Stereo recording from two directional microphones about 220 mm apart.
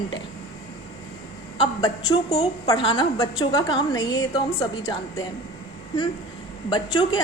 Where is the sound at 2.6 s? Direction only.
20° left (ahead or behind).